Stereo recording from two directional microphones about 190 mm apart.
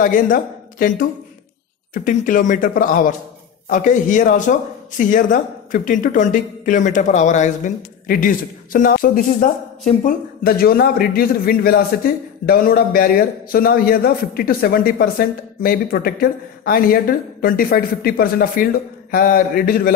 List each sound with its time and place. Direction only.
0.0 s a man's voice: 45° left (ahead or behind)